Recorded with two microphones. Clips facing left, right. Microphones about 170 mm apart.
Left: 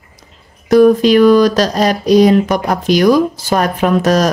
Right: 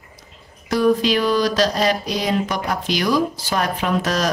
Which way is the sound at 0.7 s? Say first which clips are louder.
Left 9 dB; 50° left (ahead or behind).